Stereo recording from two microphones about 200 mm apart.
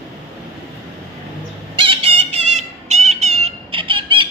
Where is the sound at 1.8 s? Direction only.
25° right (ahead or behind).